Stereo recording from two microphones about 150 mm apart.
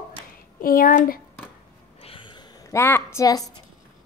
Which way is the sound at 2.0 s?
35° left (ahead or behind).